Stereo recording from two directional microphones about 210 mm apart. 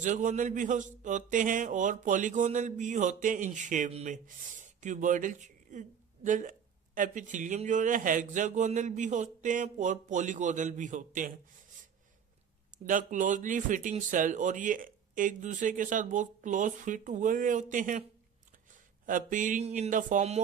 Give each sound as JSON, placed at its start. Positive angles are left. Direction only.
{"t": 0.0, "sound": "speech", "side_deg": -35}
{"t": 12.7, "sound": "speech", "side_deg": -40}
{"t": 19.0, "sound": "speech", "side_deg": -40}